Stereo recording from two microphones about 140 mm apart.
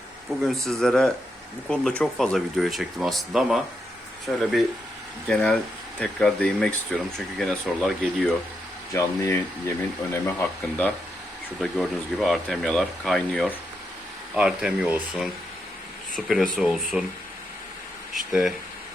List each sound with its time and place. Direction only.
0.4 s speech: centre (ahead or behind)
8.9 s speech: 20° left (ahead or behind)
11.6 s speech: centre (ahead or behind)
14.3 s speech: 5° right (ahead or behind)
18.1 s speech: centre (ahead or behind)